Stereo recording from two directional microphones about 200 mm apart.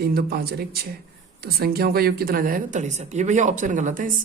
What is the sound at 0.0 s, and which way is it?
A woman's voice, 50° right (ahead or behind).